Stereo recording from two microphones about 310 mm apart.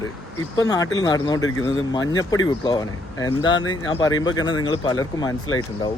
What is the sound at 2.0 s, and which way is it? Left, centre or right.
Speech, left.